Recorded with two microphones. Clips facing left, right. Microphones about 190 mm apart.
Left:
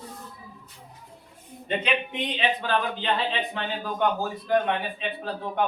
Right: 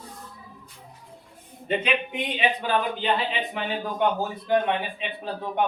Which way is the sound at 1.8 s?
10° right (ahead or behind).